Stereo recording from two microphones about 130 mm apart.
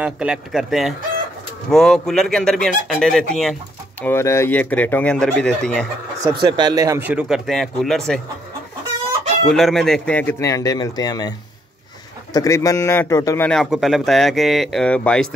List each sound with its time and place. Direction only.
0.0 s speech: 5° right (ahead or behind)
4.0 s speech: 20° left (ahead or behind)
6.4 s speech: 35° right (ahead or behind)
7.0 s speech: 10° right (ahead or behind)
9.5 s speech: centre (ahead or behind)
10.4 s speech: 25° left (ahead or behind)
13.5 s speech: centre (ahead or behind)